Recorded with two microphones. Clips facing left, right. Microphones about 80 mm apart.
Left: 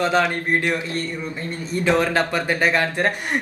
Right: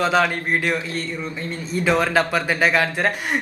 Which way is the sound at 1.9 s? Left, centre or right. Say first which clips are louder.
Even; centre.